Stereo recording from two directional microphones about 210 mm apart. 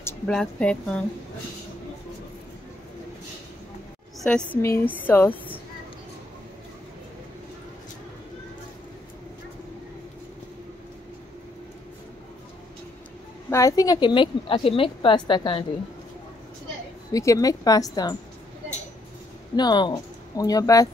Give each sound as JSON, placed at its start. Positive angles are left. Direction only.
{"t": 0.0, "sound": "speech", "side_deg": 5}
{"t": 4.2, "sound": "a woman's voice", "side_deg": 5}
{"t": 13.5, "sound": "a woman's voice", "side_deg": 15}
{"t": 17.1, "sound": "a woman's voice", "side_deg": 15}
{"t": 19.5, "sound": "speech", "side_deg": 20}